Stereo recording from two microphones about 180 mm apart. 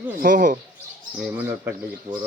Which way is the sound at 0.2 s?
50° right (ahead or behind).